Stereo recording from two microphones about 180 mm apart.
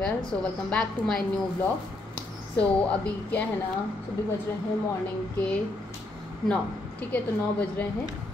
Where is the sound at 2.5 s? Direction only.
5° left (ahead or behind).